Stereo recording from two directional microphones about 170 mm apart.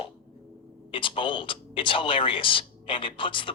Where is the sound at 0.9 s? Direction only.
30° left (ahead or behind).